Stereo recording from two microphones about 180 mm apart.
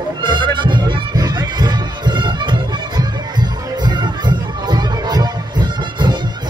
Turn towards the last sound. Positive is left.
turn(degrees=-25)  # may be behind; listen again after turning